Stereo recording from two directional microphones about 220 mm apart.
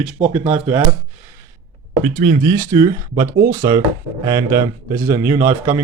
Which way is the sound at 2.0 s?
30° right (ahead or behind).